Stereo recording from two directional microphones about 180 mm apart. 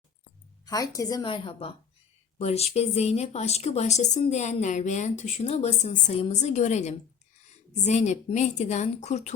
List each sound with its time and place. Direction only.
0.6 s a woman's voice: 20° left (ahead or behind); by 9.3 s 40° left (ahead or behind)